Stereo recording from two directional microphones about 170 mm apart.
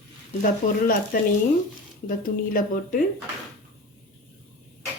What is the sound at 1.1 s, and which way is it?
Speech, 60° left (ahead or behind).